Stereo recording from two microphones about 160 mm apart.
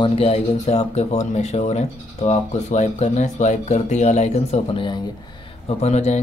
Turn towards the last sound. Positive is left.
turn(degrees=45)  # may be behind; listen again after turning